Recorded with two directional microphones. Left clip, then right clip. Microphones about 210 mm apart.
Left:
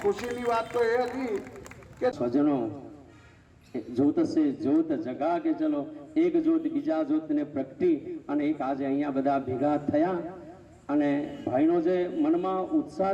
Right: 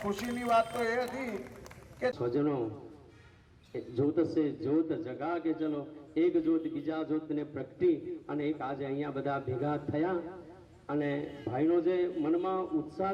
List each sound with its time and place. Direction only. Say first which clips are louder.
0.1 s a man's voice: right 2 dB; 40° left (ahead or behind)
3.9 s a man's voice: left 4 dB; 50° left (ahead or behind)